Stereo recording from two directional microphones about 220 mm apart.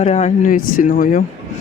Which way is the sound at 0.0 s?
30° left (ahead or behind).